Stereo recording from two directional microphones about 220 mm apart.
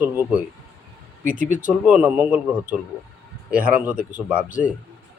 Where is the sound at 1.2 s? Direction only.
35° right (ahead or behind).